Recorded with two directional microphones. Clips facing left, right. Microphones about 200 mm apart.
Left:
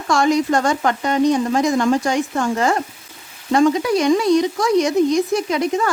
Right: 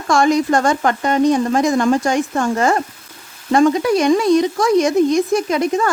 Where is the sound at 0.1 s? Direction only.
50° right (ahead or behind).